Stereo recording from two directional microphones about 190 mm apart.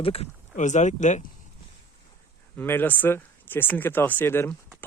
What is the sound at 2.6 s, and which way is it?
Speech, 10° left (ahead or behind).